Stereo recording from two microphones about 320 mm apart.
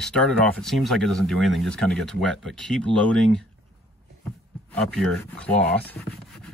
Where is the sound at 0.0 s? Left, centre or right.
Centre.